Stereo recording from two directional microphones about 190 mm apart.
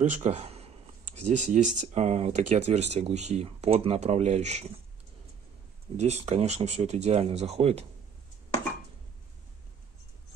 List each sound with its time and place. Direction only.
0.0 s speech: 40° right (ahead or behind)
5.9 s speech: 35° right (ahead or behind)